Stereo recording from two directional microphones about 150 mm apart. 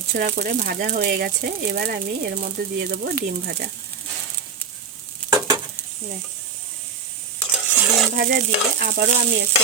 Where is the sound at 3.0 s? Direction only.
90° right.